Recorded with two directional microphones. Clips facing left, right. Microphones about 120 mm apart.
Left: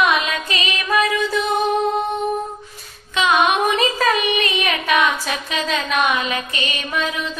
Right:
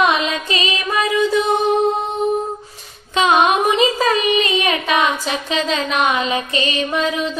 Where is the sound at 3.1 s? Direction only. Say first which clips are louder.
Right 3 dB; 35° right (ahead or behind).